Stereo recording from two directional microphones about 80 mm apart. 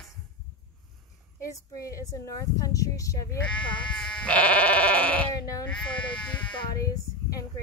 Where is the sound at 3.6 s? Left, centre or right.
Left.